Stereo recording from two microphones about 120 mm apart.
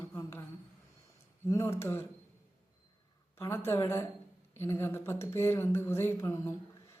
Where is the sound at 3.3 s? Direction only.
20° left (ahead or behind).